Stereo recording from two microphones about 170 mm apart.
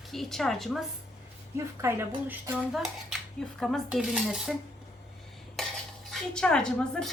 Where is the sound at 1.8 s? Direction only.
15° right (ahead or behind).